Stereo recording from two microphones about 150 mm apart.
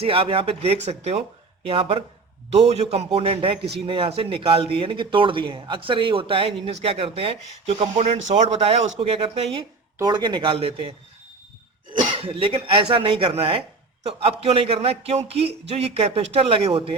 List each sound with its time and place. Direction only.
0.0 s a man's voice: 40° right (ahead or behind)
12.0 s speech: 35° right (ahead or behind)